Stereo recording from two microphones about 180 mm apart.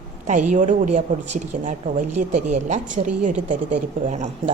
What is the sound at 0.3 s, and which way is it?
A woman's voice, 45° right (ahead or behind).